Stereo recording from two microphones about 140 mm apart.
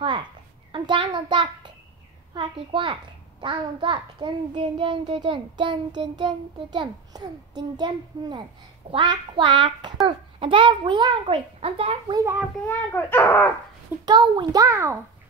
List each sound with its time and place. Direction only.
0.7 s a sound: 35° right (ahead or behind)
2.3 s a child's voice: 35° right (ahead or behind)
12.2 s a child's voice: 15° right (ahead or behind)
12.6 s a child's voice: 15° left (ahead or behind)
14.0 s a child's voice: 30° right (ahead or behind)